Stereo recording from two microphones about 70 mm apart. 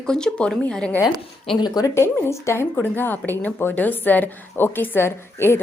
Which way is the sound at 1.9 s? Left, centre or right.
Left.